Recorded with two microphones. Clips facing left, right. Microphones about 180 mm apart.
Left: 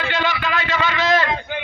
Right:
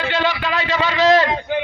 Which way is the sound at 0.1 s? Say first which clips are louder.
Right 1 dB; 30° right (ahead or behind).